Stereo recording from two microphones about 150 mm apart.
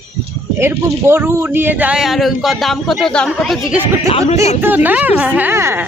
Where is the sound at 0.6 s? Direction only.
15° right (ahead or behind).